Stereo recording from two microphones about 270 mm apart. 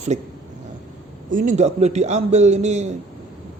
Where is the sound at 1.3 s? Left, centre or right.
Right.